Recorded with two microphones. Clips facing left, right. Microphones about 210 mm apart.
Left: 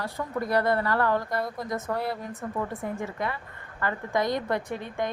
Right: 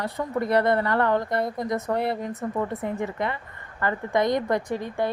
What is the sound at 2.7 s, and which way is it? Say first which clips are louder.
Speech: right 4 dB; 65° right (ahead or behind).